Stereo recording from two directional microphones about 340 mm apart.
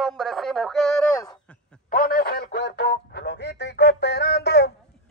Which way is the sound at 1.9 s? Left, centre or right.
Left.